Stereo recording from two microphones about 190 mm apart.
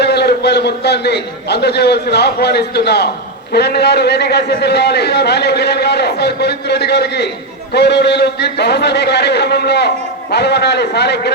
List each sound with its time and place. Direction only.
0.0 s a man's voice: 60° left (ahead or behind)